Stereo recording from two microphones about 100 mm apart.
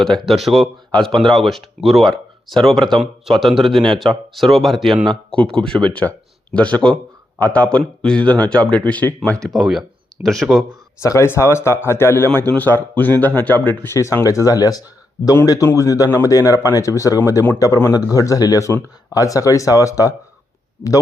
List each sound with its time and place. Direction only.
0.0 s a man's voice: centre (ahead or behind)
9.6 s speech: 5° right (ahead or behind)
11.0 s a man's voice: 30° left (ahead or behind)